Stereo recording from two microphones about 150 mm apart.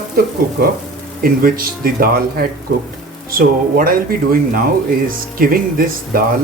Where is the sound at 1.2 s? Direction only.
70° right (ahead or behind).